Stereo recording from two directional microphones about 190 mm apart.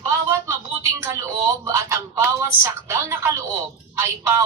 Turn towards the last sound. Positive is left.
turn(degrees=-15)  # may be behind; listen again after turning